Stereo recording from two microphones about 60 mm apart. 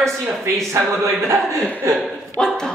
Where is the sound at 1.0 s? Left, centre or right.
Right.